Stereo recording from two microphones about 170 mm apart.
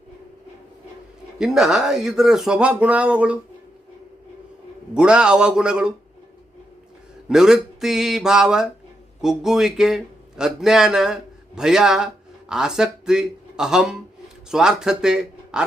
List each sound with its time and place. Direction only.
1.4 s speech: 5° right (ahead or behind)
4.9 s speech: 5° right (ahead or behind)
7.3 s speech: 5° right (ahead or behind)